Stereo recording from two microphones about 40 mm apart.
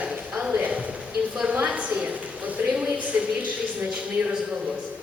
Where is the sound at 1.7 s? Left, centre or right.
Right.